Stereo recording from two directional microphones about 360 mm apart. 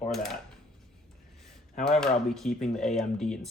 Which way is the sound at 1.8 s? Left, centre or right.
Centre.